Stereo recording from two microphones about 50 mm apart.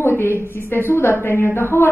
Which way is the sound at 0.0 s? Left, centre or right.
Left.